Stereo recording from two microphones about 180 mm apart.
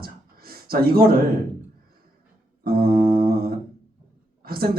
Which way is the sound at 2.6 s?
55° right (ahead or behind).